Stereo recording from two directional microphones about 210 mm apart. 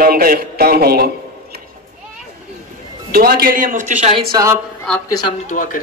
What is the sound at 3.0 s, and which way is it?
Speech, 45° right (ahead or behind).